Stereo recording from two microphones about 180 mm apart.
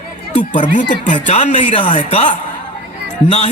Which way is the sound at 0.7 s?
45° left (ahead or behind).